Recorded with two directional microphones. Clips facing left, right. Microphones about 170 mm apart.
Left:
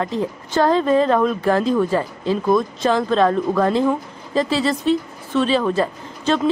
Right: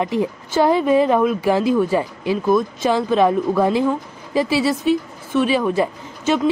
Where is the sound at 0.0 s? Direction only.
15° right (ahead or behind).